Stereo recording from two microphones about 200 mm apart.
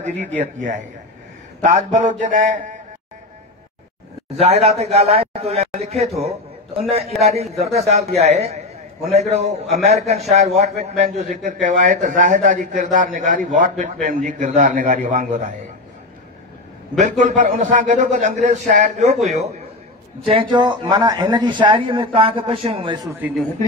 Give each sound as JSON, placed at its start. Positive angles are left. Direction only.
{"t": 0.4, "sound": "a man's voice", "side_deg": -40}
{"t": 4.4, "sound": "a man's voice", "side_deg": -30}
{"t": 17.0, "sound": "a man's voice", "side_deg": -40}
{"t": 23.2, "sound": "speech", "side_deg": -10}